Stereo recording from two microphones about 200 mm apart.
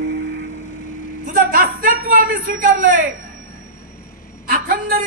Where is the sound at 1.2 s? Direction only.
40° right (ahead or behind).